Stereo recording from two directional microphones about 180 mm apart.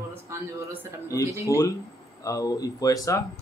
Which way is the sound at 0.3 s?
15° right (ahead or behind).